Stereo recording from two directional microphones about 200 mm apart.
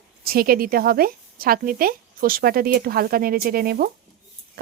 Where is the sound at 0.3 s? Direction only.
45° right (ahead or behind).